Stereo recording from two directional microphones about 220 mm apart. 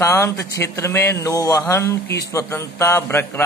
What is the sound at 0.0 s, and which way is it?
A man's voice, 10° left (ahead or behind).